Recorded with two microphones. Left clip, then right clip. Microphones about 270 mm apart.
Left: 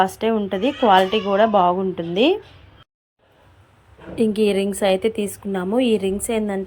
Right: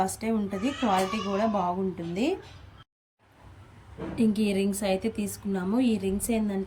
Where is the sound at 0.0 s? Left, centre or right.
Left.